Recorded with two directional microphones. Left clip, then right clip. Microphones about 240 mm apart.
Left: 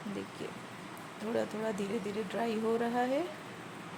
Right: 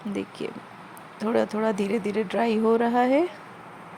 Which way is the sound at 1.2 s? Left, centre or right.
Right.